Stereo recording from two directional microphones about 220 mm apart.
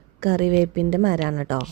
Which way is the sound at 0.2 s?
40° right (ahead or behind).